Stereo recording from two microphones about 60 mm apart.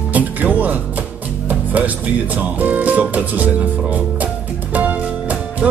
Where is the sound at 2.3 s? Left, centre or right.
Right.